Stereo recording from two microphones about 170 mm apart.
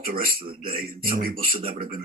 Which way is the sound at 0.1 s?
60° right (ahead or behind).